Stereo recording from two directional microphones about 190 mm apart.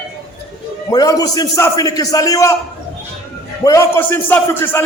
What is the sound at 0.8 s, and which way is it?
A man's voice, 20° left (ahead or behind).